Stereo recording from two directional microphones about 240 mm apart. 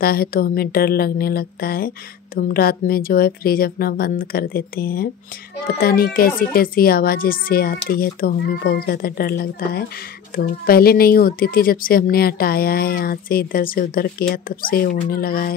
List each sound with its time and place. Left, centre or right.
0.0 s speech: left